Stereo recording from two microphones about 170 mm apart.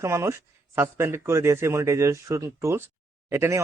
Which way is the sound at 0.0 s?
15° right (ahead or behind).